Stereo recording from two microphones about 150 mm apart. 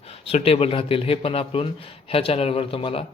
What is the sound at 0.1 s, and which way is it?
A man's voice, 40° left (ahead or behind).